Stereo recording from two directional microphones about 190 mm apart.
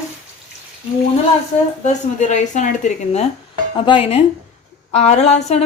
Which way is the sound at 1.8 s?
40° left (ahead or behind).